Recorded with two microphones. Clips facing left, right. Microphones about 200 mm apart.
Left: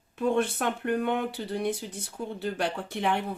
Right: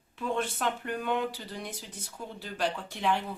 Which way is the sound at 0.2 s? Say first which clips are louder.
Left 6 dB; 50° left (ahead or behind).